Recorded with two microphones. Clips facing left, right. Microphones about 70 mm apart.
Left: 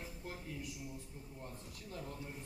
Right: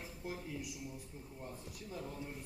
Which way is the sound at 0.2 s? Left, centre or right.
Centre.